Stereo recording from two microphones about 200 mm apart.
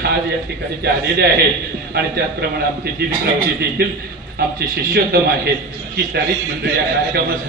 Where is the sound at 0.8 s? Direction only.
55° right (ahead or behind).